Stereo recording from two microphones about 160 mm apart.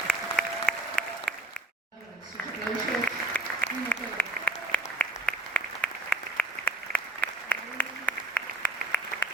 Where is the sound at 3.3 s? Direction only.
10° left (ahead or behind).